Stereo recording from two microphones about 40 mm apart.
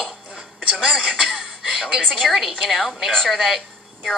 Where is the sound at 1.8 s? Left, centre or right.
Centre.